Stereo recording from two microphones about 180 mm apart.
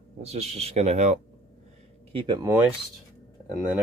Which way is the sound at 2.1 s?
25° right (ahead or behind).